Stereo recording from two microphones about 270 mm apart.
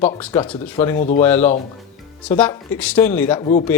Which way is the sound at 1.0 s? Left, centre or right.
Left.